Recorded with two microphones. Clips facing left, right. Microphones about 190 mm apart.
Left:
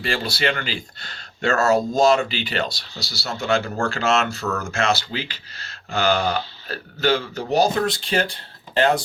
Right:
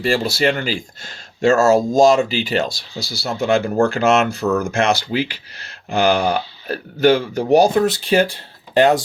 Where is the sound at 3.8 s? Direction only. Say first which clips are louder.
Right 6 dB; 15° right (ahead or behind).